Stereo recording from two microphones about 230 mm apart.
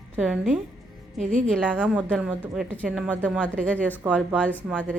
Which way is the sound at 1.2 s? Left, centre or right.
Right.